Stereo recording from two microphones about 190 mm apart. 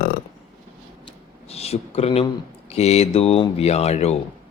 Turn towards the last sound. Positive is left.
turn(degrees=35)  # may be behind; listen again after turning